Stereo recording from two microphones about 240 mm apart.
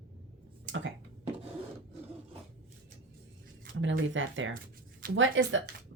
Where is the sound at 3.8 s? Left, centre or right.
Right.